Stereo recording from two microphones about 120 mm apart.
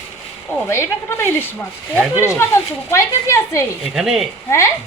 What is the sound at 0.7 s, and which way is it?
Speech, 20° left (ahead or behind).